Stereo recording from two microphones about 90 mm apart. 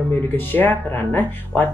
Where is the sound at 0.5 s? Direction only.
20° left (ahead or behind).